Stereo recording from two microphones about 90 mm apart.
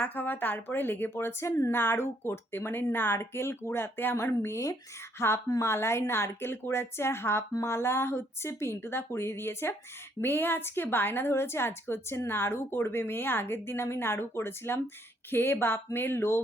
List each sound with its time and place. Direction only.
0.0 s a woman's voice: 20° left (ahead or behind)